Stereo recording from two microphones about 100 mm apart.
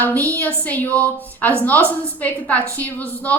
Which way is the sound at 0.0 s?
20° left (ahead or behind).